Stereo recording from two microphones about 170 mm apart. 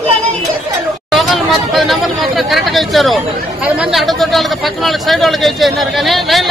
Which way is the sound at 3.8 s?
Centre (ahead or behind).